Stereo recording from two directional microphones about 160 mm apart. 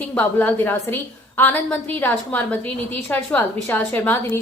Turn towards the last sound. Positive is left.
turn(degrees=15)  # may be behind; listen again after turning